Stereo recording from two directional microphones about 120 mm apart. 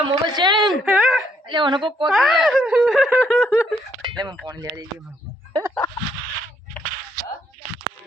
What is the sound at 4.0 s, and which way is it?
Speech, 35° right (ahead or behind).